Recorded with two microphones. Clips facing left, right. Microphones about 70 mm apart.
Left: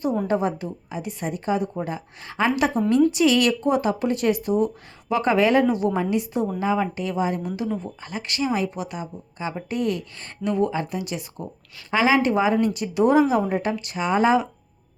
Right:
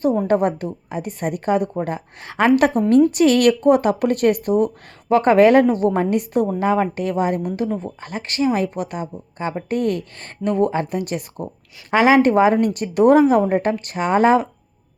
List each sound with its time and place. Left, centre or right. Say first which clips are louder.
0.3 s speech: right 5 dB; right